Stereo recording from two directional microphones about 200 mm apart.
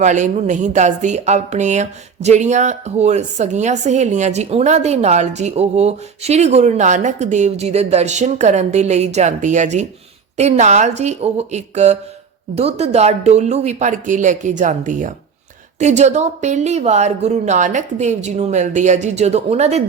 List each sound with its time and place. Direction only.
0.0 s speech: 35° right (ahead or behind)